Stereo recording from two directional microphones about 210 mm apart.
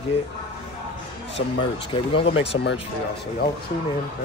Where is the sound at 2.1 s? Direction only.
25° left (ahead or behind).